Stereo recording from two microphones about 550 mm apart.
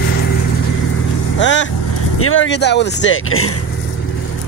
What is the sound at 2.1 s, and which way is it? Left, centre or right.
Speech, left.